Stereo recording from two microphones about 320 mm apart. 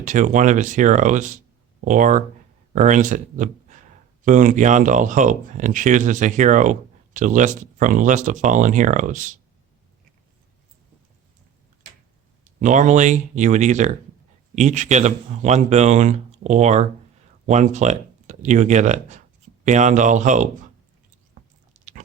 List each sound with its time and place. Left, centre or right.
0.0 s speech: right
12.5 s speech: right
21.7 s biting: right